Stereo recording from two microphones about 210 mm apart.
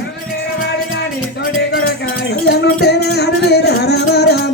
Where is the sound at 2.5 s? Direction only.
50° left (ahead or behind).